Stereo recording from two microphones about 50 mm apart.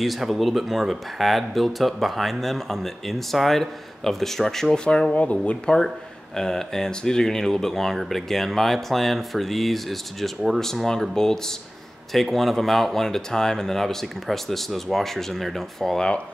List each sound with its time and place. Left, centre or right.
0.0 s speech: centre
4.8 s speech: centre